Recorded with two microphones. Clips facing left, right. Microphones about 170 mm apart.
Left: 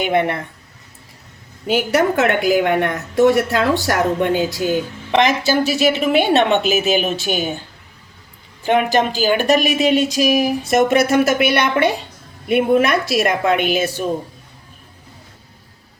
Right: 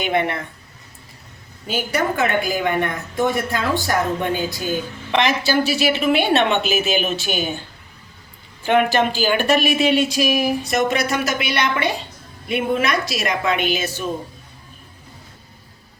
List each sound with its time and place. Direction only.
0.0 s speech: 55° left (ahead or behind)
1.6 s a woman's voice: 70° left (ahead or behind)
5.5 s a woman's voice: 40° left (ahead or behind)
8.6 s a woman's voice: 40° left (ahead or behind)
10.7 s a woman's voice: 55° left (ahead or behind)